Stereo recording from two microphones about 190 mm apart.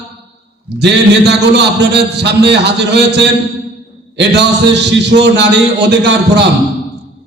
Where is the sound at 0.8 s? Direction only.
65° right (ahead or behind).